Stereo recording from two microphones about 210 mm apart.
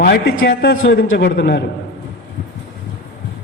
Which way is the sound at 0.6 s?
50° left (ahead or behind).